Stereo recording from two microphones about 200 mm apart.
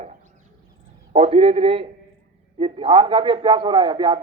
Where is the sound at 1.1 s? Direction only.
30° right (ahead or behind).